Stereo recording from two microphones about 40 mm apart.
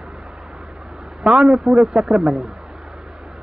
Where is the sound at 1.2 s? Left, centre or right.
Right.